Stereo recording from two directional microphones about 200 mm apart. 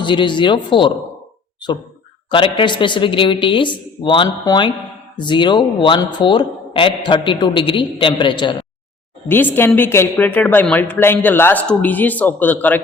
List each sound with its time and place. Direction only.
0.0 s speech: 25° left (ahead or behind)
2.3 s speech: 25° left (ahead or behind)
9.3 s a woman's voice: 10° left (ahead or behind)